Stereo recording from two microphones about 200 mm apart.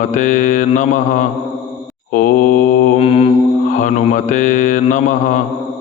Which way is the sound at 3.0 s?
30° left (ahead or behind).